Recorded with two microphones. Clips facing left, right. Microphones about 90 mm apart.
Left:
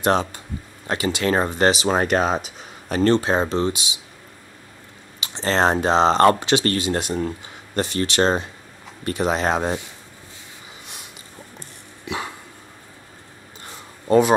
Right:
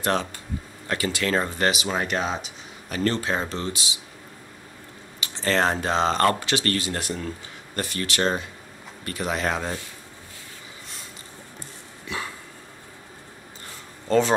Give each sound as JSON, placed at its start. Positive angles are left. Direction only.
{"t": 0.0, "sound": "speech", "side_deg": 20}
{"t": 1.9, "sound": "speech", "side_deg": 45}
{"t": 3.0, "sound": "speech", "side_deg": 25}
{"t": 5.2, "sound": "speech", "side_deg": 20}
{"t": 14.0, "sound": "speech", "side_deg": 15}